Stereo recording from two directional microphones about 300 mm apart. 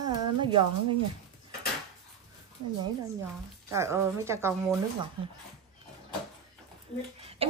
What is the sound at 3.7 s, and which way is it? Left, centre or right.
Speech, centre.